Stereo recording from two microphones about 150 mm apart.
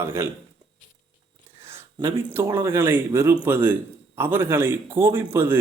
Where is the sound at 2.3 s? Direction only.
15° right (ahead or behind).